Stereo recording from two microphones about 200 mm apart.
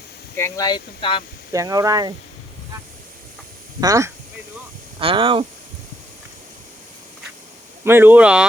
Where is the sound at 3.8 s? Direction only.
15° right (ahead or behind).